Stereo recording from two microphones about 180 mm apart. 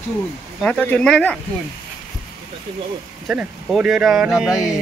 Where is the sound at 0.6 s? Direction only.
5° left (ahead or behind).